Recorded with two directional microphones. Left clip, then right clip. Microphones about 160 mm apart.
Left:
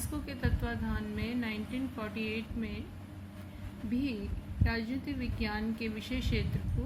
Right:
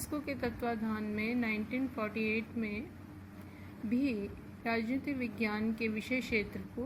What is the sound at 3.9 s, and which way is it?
A woman's voice, 30° right (ahead or behind).